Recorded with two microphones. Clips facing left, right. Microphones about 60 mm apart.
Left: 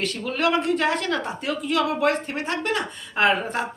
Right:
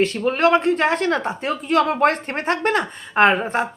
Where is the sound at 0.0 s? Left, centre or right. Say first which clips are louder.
Right 6 dB; right.